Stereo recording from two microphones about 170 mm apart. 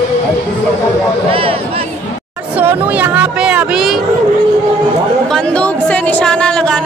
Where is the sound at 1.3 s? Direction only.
35° right (ahead or behind).